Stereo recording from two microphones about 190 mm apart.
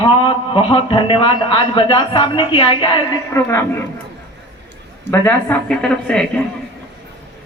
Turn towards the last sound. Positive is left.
turn(degrees=5)  # may be behind; listen again after turning